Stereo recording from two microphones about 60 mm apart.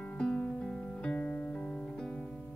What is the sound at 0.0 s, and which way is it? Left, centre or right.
Music, left.